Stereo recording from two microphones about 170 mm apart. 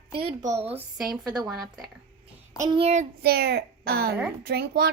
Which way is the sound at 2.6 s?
25° right (ahead or behind).